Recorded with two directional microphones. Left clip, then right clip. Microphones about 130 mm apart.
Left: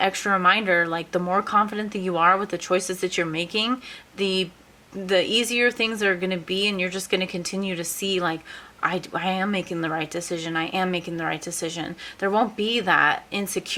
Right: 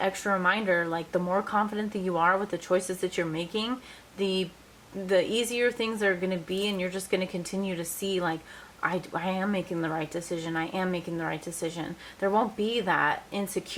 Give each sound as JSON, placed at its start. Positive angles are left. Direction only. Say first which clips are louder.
{"t": 0.0, "sound": "speech", "louder": "left 6 dB", "side_deg": 30}